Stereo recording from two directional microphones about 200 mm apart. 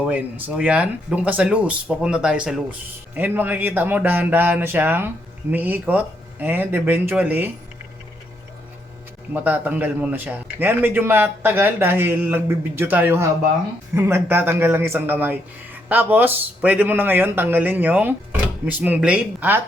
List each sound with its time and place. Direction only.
0.0 s speech: 10° right (ahead or behind)
9.3 s speech: 10° right (ahead or behind)